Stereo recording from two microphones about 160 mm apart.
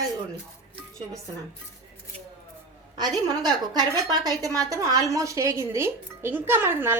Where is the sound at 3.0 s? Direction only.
25° right (ahead or behind).